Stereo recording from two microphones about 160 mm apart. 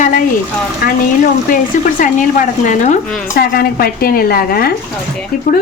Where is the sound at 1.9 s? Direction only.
55° left (ahead or behind).